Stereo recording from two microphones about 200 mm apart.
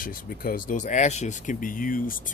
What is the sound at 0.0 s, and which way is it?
Speech, 45° left (ahead or behind).